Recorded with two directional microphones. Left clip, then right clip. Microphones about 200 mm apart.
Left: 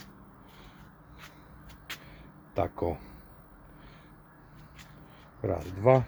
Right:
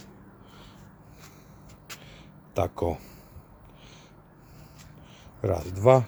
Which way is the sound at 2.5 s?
15° right (ahead or behind).